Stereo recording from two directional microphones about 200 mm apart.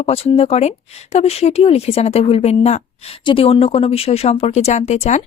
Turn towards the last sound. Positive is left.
turn(degrees=35)  # may be behind; listen again after turning